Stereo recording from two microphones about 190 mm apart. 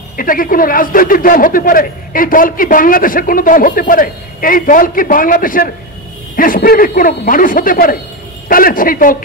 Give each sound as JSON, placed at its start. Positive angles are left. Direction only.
{"t": 0.2, "sound": "a man's voice", "side_deg": 45}